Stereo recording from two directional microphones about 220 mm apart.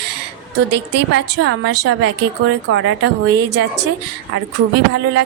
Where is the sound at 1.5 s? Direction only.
50° right (ahead or behind).